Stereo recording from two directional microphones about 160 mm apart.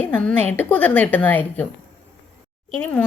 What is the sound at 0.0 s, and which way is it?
Speech, 10° left (ahead or behind).